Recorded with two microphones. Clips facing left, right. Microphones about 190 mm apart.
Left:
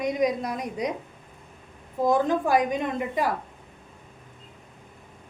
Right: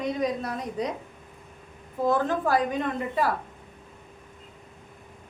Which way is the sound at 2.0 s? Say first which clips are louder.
Left 2 dB; 15° left (ahead or behind).